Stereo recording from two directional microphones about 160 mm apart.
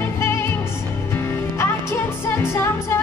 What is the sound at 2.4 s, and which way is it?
Music, 15° left (ahead or behind).